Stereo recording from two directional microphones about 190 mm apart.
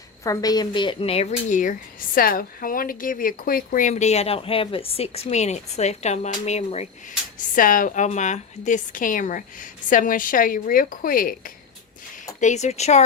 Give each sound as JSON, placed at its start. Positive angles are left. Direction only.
{"t": 0.3, "sound": "a woman's voice", "side_deg": 20}
{"t": 7.5, "sound": "a woman's voice", "side_deg": 45}